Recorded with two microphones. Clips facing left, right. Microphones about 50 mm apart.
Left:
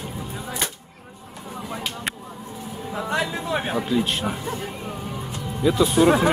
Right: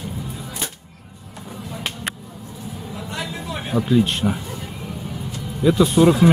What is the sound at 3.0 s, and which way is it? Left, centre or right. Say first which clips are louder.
Music: left 7 dB; left.